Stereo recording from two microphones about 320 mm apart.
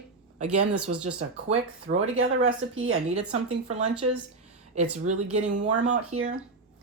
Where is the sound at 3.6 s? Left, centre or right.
Right.